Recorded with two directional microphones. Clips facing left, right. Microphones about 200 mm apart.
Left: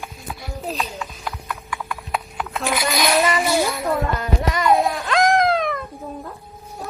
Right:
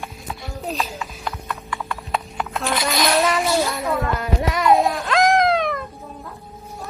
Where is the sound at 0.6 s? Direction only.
Centre (ahead or behind).